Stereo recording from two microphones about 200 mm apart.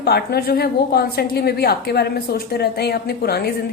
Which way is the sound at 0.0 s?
50° left (ahead or behind).